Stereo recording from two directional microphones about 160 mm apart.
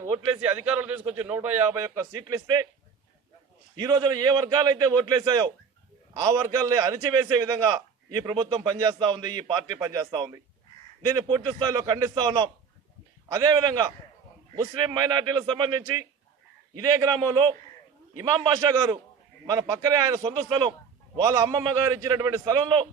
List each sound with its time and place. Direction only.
0.4 s speech: 10° right (ahead or behind)
2.1 s a man's voice: 25° right (ahead or behind)
3.8 s a man's voice: 25° right (ahead or behind)